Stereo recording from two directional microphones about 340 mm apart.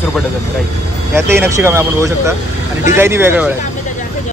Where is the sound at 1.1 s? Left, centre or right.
Centre.